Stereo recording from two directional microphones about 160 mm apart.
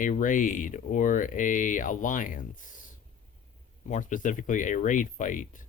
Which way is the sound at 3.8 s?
50° left (ahead or behind).